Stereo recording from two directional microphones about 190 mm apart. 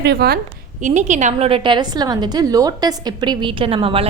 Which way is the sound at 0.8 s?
40° right (ahead or behind).